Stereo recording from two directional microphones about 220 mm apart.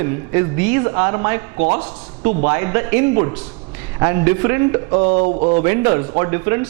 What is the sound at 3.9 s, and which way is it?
Speech, 20° right (ahead or behind).